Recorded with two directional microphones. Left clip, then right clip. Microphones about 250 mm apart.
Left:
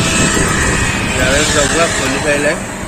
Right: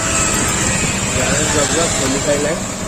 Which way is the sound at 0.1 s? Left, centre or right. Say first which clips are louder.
Left 3 dB; right.